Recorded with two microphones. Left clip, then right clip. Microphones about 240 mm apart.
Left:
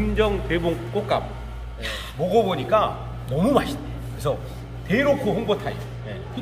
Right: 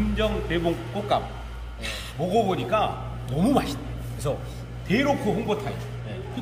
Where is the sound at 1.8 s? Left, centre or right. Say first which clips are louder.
Left 3 dB; centre.